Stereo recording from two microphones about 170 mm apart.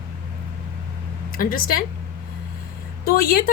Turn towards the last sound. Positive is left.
turn(degrees=60)  # may be behind; listen again after turning